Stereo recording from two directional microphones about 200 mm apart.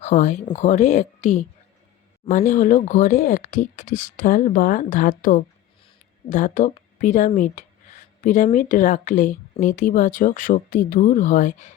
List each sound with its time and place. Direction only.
0.0 s a woman's voice: 35° left (ahead or behind)
2.5 s a woman's voice: 40° left (ahead or behind)